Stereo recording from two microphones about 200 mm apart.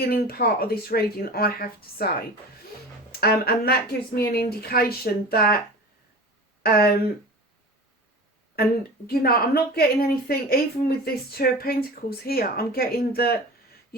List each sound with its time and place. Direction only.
0.0 s a woman's voice: 50° left (ahead or behind)
6.6 s speech: 50° left (ahead or behind)
9.0 s a woman's voice: 50° left (ahead or behind)